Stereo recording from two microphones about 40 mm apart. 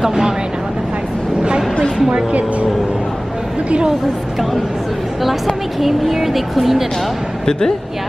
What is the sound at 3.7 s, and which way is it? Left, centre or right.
Speech, right.